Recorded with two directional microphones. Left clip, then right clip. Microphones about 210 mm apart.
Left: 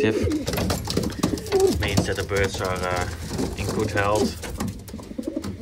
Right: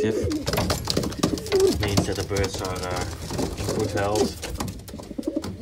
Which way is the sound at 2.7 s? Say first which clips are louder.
Left 4 dB; 15° right (ahead or behind).